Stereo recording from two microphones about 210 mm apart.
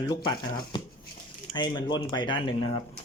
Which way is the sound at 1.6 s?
20° left (ahead or behind).